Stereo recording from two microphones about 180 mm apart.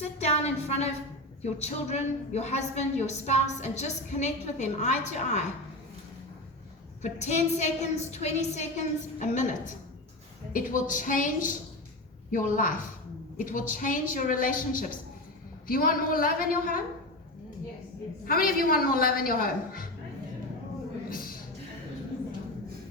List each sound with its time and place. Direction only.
0.2 s a woman's voice: 35° left (ahead or behind)
7.0 s a woman's voice: 40° left (ahead or behind)
18.3 s a woman's voice: 55° left (ahead or behind)
21.1 s a sound: 55° left (ahead or behind)